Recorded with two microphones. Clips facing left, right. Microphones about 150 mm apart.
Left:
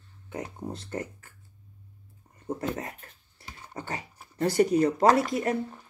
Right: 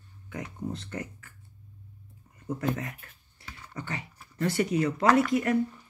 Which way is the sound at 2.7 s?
35° left (ahead or behind).